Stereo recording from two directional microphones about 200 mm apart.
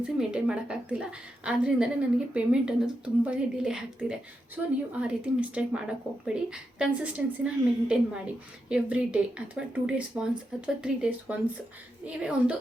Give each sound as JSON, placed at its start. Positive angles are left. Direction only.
{"t": 0.0, "sound": "a woman's voice", "side_deg": -5}